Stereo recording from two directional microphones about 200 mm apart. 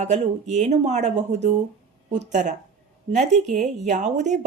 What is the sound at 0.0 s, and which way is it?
A woman's voice, 35° right (ahead or behind).